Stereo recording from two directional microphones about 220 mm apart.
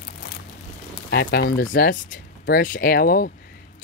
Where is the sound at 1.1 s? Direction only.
45° left (ahead or behind).